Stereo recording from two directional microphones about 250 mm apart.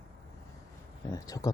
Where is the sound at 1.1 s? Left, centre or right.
Centre.